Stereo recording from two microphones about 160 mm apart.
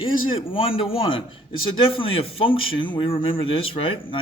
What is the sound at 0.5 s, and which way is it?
A man's voice, 35° left (ahead or behind).